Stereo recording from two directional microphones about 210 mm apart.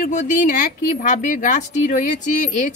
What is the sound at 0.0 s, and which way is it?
Speech, 35° left (ahead or behind).